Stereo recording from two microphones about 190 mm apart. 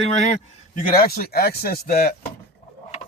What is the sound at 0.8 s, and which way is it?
A man's voice, 50° left (ahead or behind).